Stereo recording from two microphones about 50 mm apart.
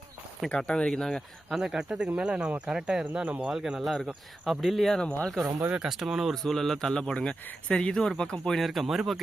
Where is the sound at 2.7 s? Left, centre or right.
Centre.